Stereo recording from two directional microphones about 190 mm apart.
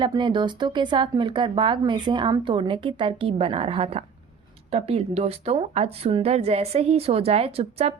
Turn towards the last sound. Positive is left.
turn(degrees=-35)  # may be behind; listen again after turning